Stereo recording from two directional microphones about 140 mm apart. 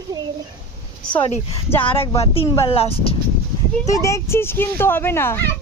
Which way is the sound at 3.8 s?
25° left (ahead or behind).